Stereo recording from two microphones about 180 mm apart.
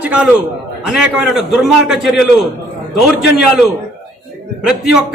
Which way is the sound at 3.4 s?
5° right (ahead or behind).